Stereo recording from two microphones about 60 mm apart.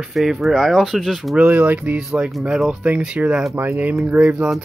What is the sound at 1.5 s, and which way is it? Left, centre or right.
Speech, right.